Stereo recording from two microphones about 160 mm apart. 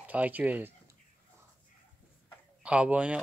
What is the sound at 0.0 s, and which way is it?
Speech, 10° right (ahead or behind).